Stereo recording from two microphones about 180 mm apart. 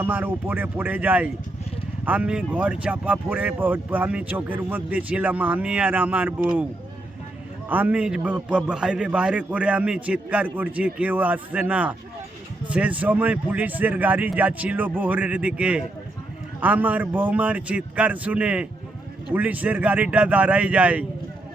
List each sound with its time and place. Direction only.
0.0 s speech: 10° right (ahead or behind)
7.7 s speech: 10° right (ahead or behind)